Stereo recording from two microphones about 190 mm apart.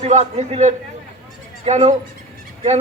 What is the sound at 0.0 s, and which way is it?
A man's voice, 35° right (ahead or behind).